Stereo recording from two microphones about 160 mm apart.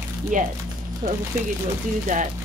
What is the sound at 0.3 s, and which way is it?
Speech, 55° right (ahead or behind).